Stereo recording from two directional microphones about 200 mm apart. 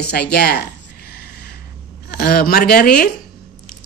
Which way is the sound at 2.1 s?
50° left (ahead or behind).